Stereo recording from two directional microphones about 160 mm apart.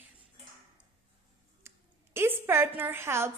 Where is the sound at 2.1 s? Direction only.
15° right (ahead or behind).